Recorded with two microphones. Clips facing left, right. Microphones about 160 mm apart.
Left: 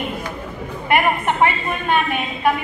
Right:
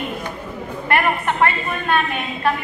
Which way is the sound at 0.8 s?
15° left (ahead or behind).